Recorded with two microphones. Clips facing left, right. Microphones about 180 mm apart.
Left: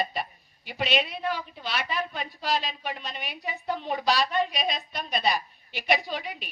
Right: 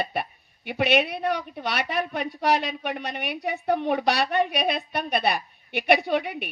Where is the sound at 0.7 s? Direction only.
60° right (ahead or behind).